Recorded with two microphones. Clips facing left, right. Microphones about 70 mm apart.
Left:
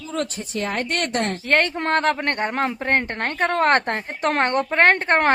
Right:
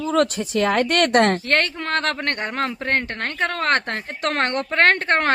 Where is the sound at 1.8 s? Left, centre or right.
Left.